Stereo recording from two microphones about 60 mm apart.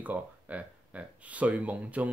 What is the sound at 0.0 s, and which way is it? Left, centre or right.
Speech, right.